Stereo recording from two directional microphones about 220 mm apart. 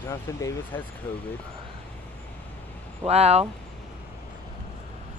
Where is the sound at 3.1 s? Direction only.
30° right (ahead or behind).